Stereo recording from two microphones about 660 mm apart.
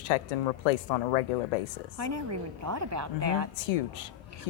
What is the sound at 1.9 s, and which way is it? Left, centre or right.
A woman's voice, right.